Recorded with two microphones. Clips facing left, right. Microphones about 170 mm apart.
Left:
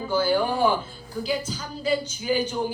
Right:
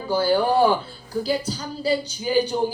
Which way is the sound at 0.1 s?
35° right (ahead or behind).